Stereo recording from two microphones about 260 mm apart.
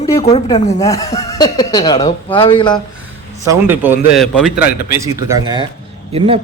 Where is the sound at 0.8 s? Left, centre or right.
Centre.